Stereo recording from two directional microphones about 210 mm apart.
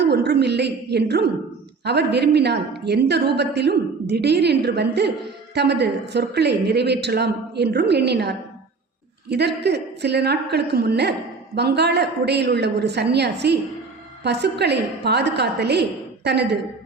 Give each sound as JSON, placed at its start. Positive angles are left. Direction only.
{"t": 0.0, "sound": "a woman's voice", "side_deg": -50}